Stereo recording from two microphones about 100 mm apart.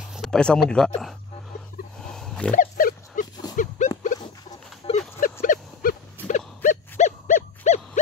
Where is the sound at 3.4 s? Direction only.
40° left (ahead or behind).